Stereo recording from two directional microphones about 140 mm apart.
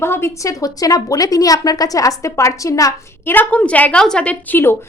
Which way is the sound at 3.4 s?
10° left (ahead or behind).